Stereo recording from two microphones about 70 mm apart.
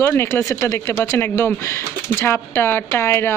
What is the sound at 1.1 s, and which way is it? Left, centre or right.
Speech, left.